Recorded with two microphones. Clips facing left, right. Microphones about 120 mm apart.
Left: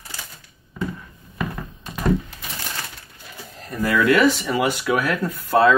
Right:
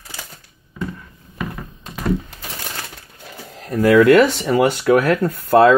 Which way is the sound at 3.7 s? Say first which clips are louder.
Right 9 dB; 65° right (ahead or behind).